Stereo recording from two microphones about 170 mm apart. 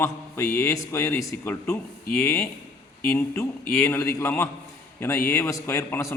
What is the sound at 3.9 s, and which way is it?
A man's voice, 15° left (ahead or behind).